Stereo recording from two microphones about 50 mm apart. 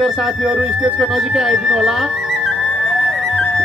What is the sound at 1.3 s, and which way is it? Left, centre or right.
Speech, centre.